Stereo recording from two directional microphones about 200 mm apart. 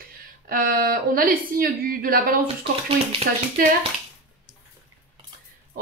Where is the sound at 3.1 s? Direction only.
25° right (ahead or behind).